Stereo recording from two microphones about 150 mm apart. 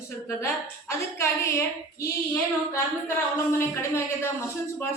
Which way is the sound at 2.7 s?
15° left (ahead or behind).